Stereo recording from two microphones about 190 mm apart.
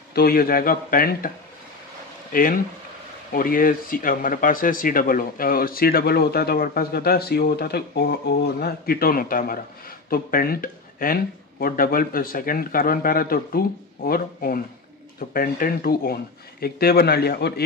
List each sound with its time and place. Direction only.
0.1 s speech: 50° left (ahead or behind)
2.3 s speech: 50° left (ahead or behind)